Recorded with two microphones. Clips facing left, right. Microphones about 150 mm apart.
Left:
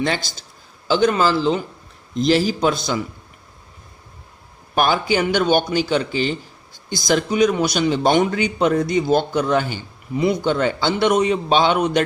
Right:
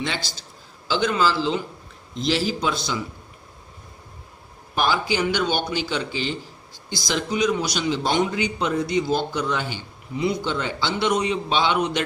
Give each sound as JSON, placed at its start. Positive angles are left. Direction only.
{"t": 0.0, "sound": "a man's voice", "side_deg": 50}
{"t": 4.7, "sound": "a man's voice", "side_deg": 55}